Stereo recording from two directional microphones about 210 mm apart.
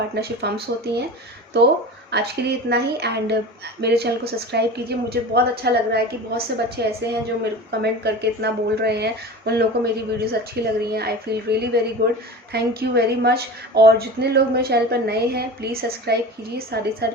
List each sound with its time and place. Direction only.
0.2 s a woman's voice: 50° right (ahead or behind)